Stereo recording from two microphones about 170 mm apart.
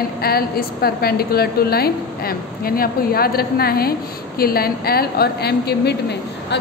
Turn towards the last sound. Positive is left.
turn(degrees=75)  # may be behind; listen again after turning